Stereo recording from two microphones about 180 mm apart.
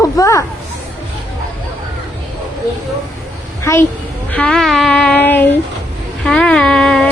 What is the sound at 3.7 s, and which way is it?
Speech, 15° left (ahead or behind).